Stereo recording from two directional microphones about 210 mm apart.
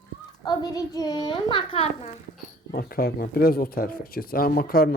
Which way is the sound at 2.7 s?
45° left (ahead or behind).